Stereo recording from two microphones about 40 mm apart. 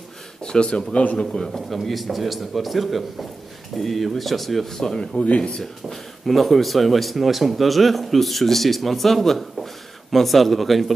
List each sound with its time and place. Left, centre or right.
0.4 s a man's voice: left
1.3 s a man's voice: centre
1.7 s speech: centre
5.6 s speech: centre